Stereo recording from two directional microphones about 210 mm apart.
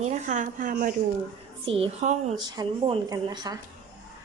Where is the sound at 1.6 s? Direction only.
25° right (ahead or behind).